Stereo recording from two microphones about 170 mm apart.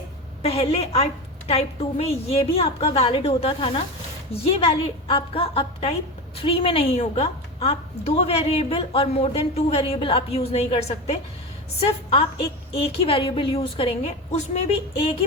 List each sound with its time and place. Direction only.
0.4 s a woman's voice: 35° left (ahead or behind)